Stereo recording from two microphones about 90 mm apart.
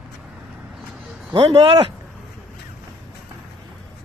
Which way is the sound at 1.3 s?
65° right (ahead or behind).